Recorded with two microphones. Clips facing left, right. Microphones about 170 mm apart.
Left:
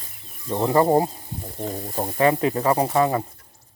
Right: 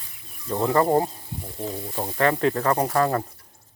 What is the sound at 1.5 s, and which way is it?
Stir, 40° left (ahead or behind).